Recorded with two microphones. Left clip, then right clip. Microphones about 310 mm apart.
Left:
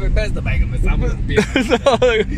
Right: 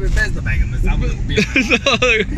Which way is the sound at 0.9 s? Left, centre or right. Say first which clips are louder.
Left 1 dB; left.